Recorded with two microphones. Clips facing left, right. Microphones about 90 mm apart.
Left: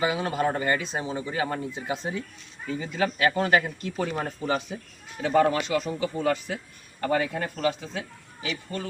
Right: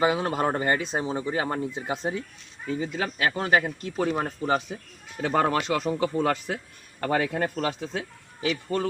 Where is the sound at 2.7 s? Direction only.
25° right (ahead or behind).